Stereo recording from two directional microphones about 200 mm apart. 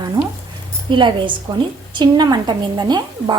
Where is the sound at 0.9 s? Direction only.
25° right (ahead or behind).